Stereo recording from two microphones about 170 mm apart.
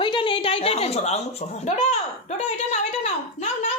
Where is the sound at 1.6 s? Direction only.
40° left (ahead or behind).